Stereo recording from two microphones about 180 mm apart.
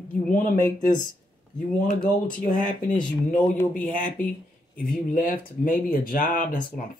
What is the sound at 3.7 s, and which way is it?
Speech, 45° left (ahead or behind).